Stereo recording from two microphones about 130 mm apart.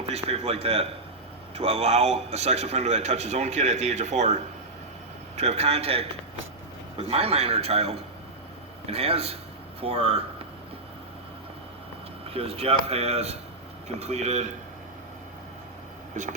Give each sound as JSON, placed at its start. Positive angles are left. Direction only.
{"t": 0.1, "sound": "a man's voice", "side_deg": -50}
{"t": 5.4, "sound": "a man's voice", "side_deg": -55}
{"t": 12.3, "sound": "a man's voice", "side_deg": -50}